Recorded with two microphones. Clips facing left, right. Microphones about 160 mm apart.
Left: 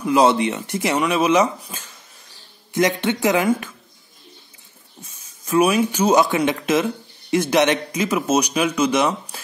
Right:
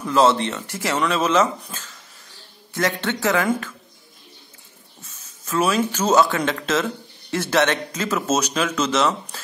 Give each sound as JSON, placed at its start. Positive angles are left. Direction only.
{"t": 0.0, "sound": "speech", "side_deg": 15}
{"t": 5.0, "sound": "speech", "side_deg": 15}